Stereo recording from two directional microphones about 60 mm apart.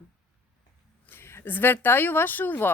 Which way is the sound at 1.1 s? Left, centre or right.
Left.